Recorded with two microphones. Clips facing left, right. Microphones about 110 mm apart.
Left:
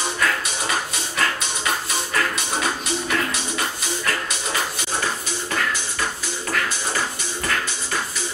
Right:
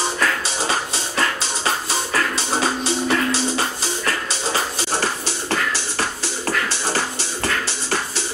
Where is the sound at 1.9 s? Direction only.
30° right (ahead or behind).